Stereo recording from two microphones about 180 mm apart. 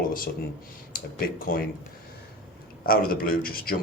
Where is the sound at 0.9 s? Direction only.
55° left (ahead or behind).